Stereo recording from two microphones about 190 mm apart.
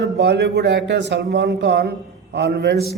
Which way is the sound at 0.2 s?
60° right (ahead or behind).